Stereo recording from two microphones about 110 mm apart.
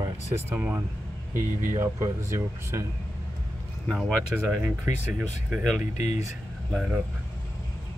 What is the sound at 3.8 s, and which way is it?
Speech, centre (ahead or behind).